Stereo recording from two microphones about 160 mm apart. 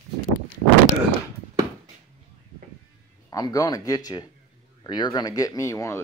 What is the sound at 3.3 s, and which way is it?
Speech, 25° left (ahead or behind).